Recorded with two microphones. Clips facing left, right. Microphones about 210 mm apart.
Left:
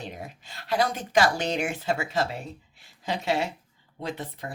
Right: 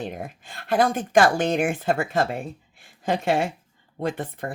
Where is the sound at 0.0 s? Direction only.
50° right (ahead or behind).